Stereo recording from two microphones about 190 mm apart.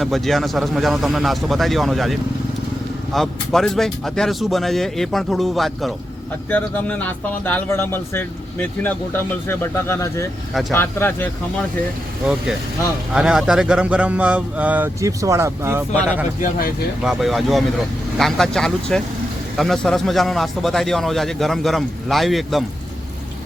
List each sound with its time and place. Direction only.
0.0 s a man's voice: centre (ahead or behind)
13.1 s speech: 5° right (ahead or behind)
16.4 s speech: 50° left (ahead or behind)
17.0 s a man's voice: centre (ahead or behind)